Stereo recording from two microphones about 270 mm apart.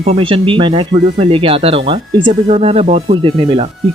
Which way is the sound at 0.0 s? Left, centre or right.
Right.